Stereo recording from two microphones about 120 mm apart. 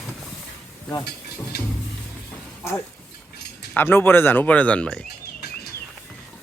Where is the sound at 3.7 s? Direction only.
20° left (ahead or behind).